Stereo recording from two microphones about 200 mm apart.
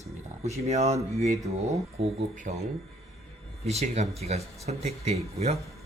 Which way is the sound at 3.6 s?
35° right (ahead or behind).